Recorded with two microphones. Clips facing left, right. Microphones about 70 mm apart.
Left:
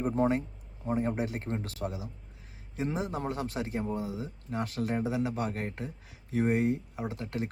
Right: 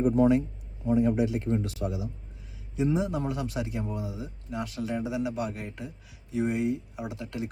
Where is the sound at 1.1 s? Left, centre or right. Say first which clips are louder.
Right 6 dB; left.